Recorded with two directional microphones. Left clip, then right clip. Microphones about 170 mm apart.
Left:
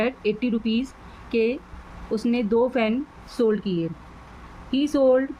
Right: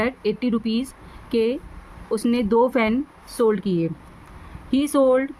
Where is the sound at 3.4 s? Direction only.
45° right (ahead or behind).